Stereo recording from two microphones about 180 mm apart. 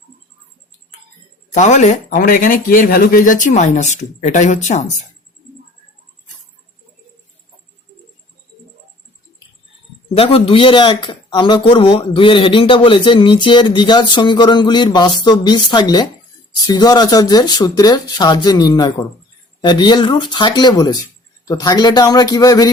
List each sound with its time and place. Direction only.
1.5 s speech: 40° left (ahead or behind)
10.2 s a man's voice: 30° left (ahead or behind)